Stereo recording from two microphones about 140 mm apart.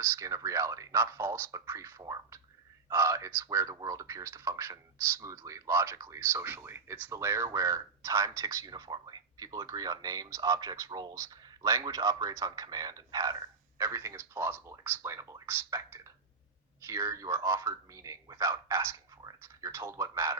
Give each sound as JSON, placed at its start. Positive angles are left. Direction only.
{"t": 0.2, "sound": "speech", "side_deg": -20}